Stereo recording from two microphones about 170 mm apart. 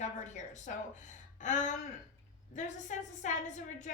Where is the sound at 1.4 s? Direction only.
45° left (ahead or behind).